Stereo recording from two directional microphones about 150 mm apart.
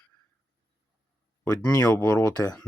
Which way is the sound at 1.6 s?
20° left (ahead or behind).